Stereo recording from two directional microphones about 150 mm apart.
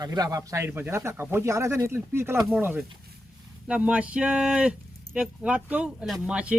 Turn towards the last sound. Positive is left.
turn(degrees=-5)  # may be behind; listen again after turning